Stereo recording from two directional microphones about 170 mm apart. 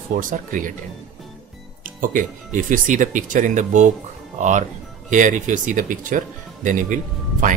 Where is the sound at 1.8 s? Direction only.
50° right (ahead or behind).